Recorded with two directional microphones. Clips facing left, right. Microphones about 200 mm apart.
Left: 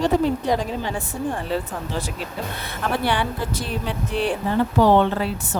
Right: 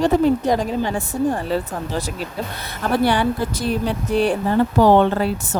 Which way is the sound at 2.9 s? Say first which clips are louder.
Right 6 dB; 40° right (ahead or behind).